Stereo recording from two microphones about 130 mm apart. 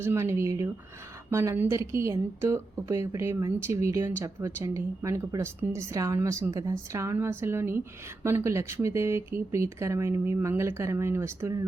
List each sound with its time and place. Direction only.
0.0 s speech: 20° right (ahead or behind)